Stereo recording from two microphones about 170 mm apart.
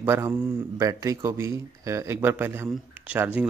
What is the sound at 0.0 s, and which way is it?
Speech, 10° right (ahead or behind).